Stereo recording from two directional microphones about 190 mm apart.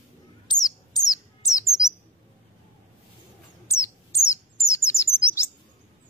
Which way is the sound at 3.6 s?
15° left (ahead or behind).